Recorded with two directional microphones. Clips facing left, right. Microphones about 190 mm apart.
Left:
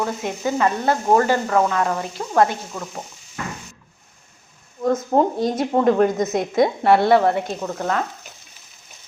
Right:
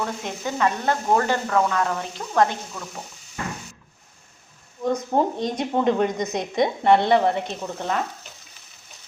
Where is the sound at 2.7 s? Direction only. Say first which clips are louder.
Left 5 dB; 20° left (ahead or behind).